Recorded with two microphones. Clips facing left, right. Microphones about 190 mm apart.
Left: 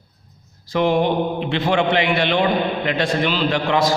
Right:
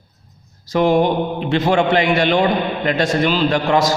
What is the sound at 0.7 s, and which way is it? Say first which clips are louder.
A man's voice: right 3 dB; 45° right (ahead or behind).